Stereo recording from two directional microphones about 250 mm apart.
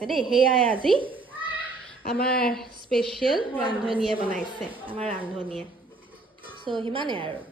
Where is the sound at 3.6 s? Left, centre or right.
Right.